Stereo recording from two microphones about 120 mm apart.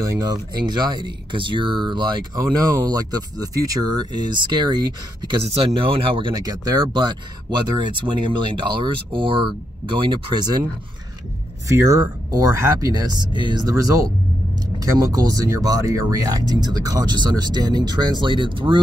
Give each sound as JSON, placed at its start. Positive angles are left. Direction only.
{"t": 0.2, "sound": "speech", "side_deg": -35}
{"t": 5.6, "sound": "speech", "side_deg": -50}
{"t": 11.6, "sound": "speech", "side_deg": -25}